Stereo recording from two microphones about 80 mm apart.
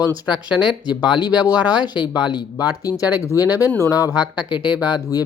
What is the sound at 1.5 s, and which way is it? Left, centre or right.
Speech, centre.